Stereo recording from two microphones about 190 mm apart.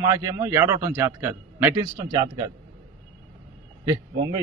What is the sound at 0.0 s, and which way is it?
A man's voice, 15° right (ahead or behind).